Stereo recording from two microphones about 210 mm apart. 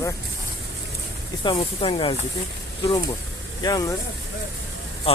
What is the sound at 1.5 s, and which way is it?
Speech, 25° left (ahead or behind).